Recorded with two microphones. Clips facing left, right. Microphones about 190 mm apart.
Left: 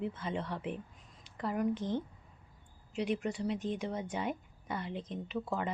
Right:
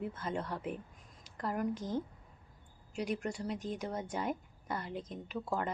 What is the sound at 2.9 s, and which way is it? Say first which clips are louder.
Speech: left 2 dB; 45° right (ahead or behind).